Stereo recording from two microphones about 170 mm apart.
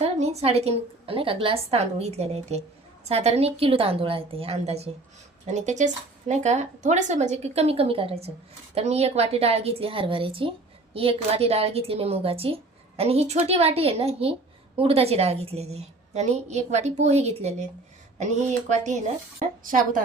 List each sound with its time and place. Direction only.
0.0 s a woman's voice: 40° right (ahead or behind)